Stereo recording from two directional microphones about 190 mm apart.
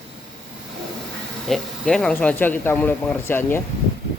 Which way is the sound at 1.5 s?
Centre (ahead or behind).